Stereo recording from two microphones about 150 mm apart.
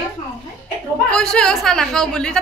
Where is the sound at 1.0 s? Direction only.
5° left (ahead or behind).